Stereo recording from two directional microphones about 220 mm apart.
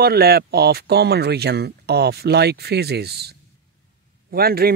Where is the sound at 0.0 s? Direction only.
45° right (ahead or behind).